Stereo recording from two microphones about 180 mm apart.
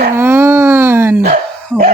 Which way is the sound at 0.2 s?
10° right (ahead or behind).